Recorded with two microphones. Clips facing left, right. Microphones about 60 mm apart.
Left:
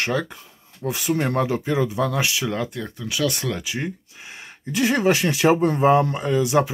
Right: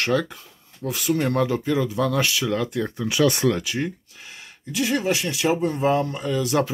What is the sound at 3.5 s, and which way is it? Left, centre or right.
Speech, centre.